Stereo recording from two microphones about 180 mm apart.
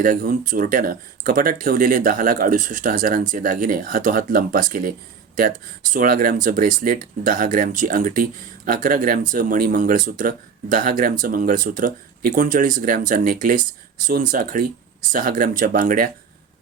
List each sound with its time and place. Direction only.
0.0 s speech: 50° right (ahead or behind)